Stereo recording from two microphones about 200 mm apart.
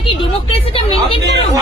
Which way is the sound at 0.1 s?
25° left (ahead or behind).